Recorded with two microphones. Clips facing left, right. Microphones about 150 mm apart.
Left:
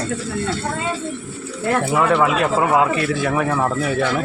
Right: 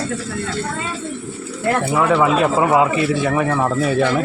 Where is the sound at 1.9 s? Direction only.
Centre (ahead or behind).